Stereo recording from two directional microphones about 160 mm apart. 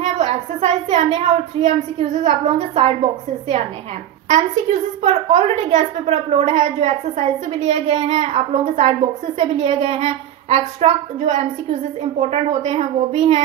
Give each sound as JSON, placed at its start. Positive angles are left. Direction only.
{"t": 0.0, "sound": "a woman's voice", "side_deg": -40}